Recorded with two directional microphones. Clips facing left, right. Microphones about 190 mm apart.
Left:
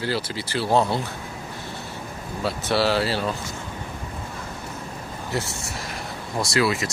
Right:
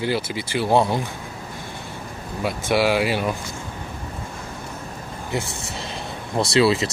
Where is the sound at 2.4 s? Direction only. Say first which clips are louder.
Right 2 dB; 15° right (ahead or behind).